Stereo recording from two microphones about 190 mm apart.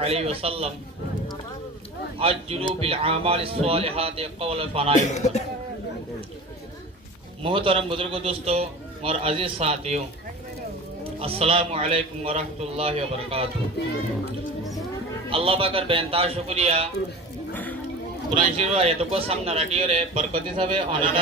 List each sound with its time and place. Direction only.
0.0 s speech: 30° right (ahead or behind)
2.1 s speech: 30° right (ahead or behind)
4.9 s speech: 40° left (ahead or behind)
7.4 s a man's voice: 25° right (ahead or behind)
11.1 s speech: 30° right (ahead or behind)
15.2 s a man's voice: 30° right (ahead or behind)
18.3 s speech: 35° right (ahead or behind)